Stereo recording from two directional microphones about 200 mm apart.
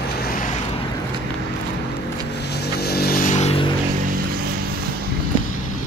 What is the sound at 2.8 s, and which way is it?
Vehicle, 50° left (ahead or behind).